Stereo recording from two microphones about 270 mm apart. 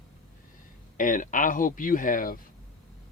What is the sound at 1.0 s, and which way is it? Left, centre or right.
Speech, left.